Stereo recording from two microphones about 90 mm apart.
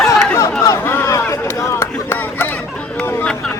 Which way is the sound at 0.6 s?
30° left (ahead or behind).